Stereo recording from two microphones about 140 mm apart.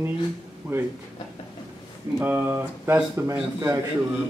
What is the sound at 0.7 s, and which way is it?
Speech, 15° right (ahead or behind).